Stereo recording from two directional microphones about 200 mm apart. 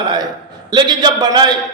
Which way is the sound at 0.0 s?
20° right (ahead or behind).